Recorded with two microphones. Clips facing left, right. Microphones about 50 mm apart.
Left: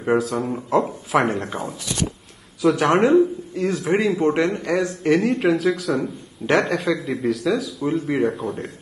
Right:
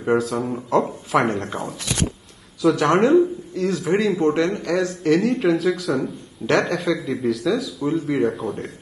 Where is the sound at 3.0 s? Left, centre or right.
Centre.